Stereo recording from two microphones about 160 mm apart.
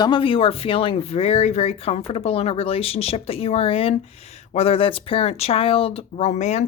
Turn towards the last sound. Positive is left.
turn(degrees=45)  # may be behind; listen again after turning